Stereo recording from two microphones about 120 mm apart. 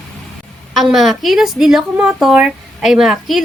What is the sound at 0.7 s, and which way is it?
A woman's voice, centre (ahead or behind).